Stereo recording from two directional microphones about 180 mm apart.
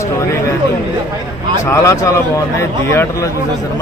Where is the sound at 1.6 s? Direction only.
15° left (ahead or behind).